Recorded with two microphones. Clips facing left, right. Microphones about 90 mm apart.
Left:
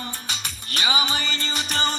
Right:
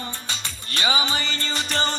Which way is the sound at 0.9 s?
35° right (ahead or behind).